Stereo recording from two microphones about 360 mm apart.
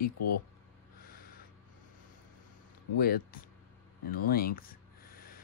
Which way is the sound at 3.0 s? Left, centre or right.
Left.